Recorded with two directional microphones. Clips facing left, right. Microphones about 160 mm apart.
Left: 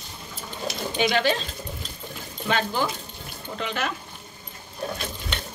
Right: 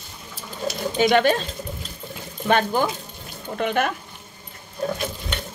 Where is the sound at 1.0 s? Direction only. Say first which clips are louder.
Right 5 dB; 50° right (ahead or behind).